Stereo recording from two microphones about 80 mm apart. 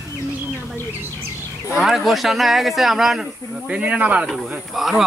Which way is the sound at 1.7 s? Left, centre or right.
Centre.